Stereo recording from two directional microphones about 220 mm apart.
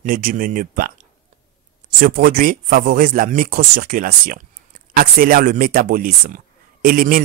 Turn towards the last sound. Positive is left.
turn(degrees=-40)  # may be behind; listen again after turning